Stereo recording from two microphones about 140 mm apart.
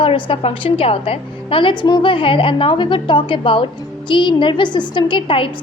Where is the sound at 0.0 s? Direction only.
40° left (ahead or behind).